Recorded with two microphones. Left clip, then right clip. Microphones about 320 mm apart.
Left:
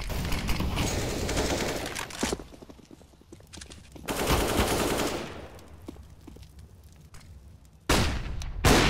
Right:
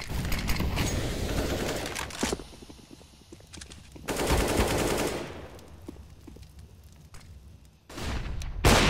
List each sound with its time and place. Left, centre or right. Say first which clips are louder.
0.0 s clip-clop: left 1 dB; centre
1.3 s a sound: left 3 dB; centre
1.7 s a sound: even; centre
3.5 s machine gun: left 1 dB; centre
5.9 s clip-clop: left 1 dB; centre
7.8 s fusillade: left 11 dB; centre